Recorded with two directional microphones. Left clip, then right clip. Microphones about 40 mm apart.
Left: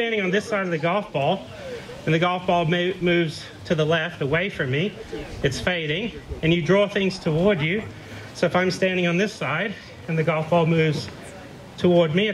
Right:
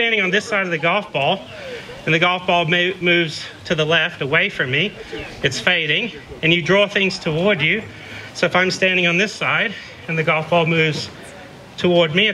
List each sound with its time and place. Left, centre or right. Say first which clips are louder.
0.0 s a man's voice: right 6 dB; right